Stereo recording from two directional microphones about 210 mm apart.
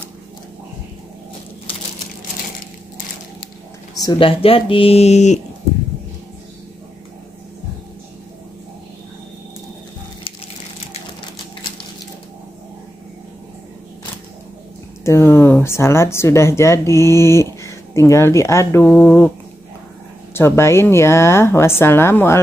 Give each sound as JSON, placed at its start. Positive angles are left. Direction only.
{"t": 4.0, "sound": "speech", "side_deg": 20}
{"t": 15.0, "sound": "speech", "side_deg": 10}
{"t": 20.3, "sound": "a woman's voice", "side_deg": 10}